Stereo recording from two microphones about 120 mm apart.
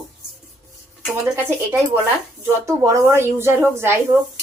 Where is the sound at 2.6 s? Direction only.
25° right (ahead or behind).